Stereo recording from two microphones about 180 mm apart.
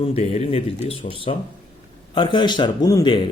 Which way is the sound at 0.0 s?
35° left (ahead or behind).